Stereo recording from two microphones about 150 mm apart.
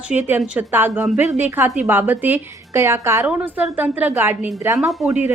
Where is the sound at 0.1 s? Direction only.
10° right (ahead or behind).